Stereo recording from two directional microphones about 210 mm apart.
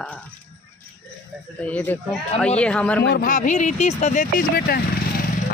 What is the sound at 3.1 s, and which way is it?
Speech, 40° left (ahead or behind).